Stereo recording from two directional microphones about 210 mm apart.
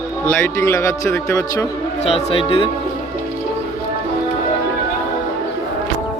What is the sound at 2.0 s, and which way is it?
Speech, 30° left (ahead or behind).